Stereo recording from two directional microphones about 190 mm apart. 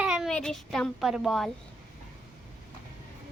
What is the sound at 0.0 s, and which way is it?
A child's voice, 5° right (ahead or behind).